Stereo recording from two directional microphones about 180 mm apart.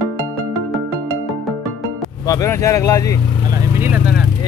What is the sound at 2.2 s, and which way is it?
Speech, 15° left (ahead or behind).